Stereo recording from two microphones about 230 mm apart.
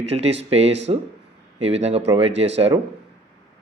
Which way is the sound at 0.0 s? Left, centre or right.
Right.